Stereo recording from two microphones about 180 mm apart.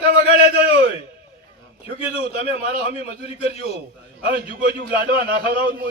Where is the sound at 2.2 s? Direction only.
35° left (ahead or behind).